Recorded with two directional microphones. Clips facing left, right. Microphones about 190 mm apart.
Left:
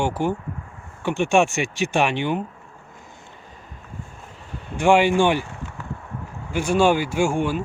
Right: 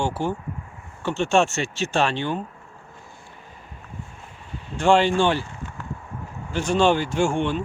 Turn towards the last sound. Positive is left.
turn(degrees=5)  # may be behind; listen again after turning